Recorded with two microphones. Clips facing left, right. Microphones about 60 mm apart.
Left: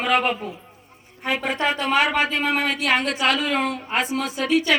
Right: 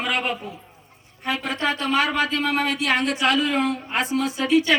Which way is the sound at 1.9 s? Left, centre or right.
Left.